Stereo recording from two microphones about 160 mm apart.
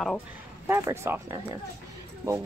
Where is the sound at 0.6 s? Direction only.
15° right (ahead or behind).